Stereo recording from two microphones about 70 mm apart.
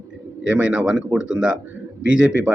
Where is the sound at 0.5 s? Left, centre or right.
Centre.